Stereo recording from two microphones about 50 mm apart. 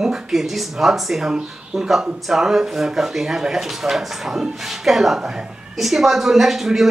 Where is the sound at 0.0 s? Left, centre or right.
Centre.